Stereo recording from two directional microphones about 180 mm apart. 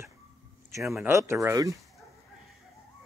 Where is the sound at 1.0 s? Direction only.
15° right (ahead or behind).